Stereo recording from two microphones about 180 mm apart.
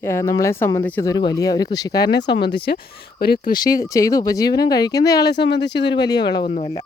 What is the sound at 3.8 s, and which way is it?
Speech, 20° left (ahead or behind).